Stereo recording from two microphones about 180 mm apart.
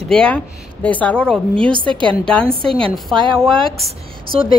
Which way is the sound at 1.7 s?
25° right (ahead or behind).